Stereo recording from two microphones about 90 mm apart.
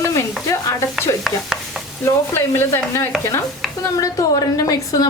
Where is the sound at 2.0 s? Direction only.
25° left (ahead or behind).